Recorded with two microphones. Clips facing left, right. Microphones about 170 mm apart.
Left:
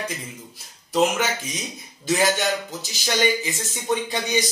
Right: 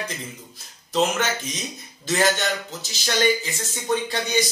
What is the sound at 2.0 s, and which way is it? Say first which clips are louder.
A man's voice: left 1 dB; 10° left (ahead or behind).